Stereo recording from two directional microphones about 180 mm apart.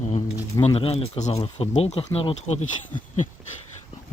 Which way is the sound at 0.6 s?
35° left (ahead or behind).